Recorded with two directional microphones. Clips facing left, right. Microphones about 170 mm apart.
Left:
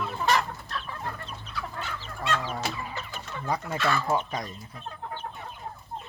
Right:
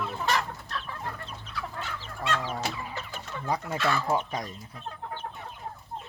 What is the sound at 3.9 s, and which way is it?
Speech, 10° right (ahead or behind).